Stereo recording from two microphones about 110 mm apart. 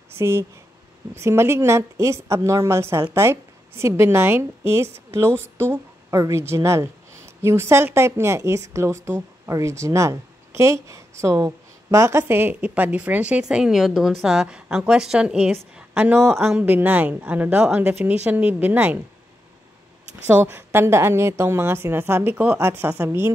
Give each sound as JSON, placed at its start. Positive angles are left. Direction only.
{"t": 0.2, "sound": "a woman's voice", "side_deg": -20}
{"t": 20.2, "sound": "a woman's voice", "side_deg": -20}